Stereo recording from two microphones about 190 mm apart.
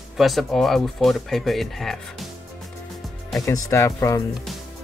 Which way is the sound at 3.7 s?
15° left (ahead or behind).